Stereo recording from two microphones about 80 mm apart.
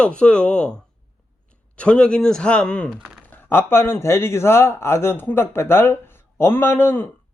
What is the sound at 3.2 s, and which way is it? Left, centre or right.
Speech, left.